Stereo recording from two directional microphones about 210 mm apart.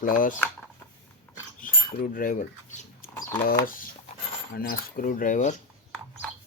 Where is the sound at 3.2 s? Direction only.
15° left (ahead or behind).